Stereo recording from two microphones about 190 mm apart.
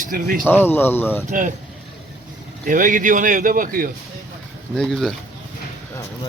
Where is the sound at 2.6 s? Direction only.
45° right (ahead or behind).